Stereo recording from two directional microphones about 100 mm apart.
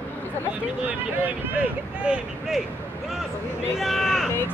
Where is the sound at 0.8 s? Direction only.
20° right (ahead or behind).